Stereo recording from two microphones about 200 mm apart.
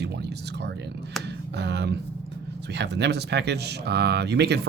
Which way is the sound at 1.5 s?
55° right (ahead or behind).